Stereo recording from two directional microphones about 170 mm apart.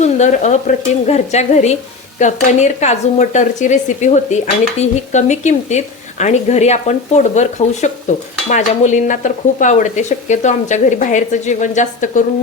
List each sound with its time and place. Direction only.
0.0 s speech: 45° left (ahead or behind)